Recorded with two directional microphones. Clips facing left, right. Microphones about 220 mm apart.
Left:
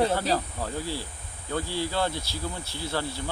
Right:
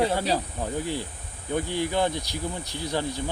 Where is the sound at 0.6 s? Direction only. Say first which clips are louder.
Right 3 dB; 15° right (ahead or behind).